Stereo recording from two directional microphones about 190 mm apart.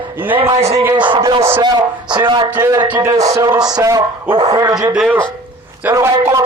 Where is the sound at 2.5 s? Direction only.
10° right (ahead or behind).